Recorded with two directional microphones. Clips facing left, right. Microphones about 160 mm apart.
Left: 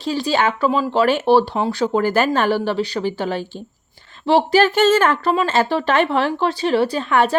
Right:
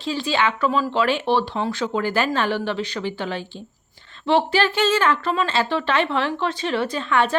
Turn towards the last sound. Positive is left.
turn(degrees=40)  # may be behind; listen again after turning